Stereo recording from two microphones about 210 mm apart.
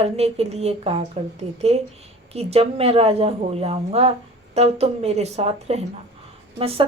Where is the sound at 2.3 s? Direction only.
30° right (ahead or behind).